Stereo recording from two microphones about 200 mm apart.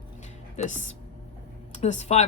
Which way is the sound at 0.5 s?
35° left (ahead or behind).